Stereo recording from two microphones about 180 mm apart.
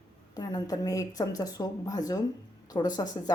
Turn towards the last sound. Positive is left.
turn(degrees=20)  # may be behind; listen again after turning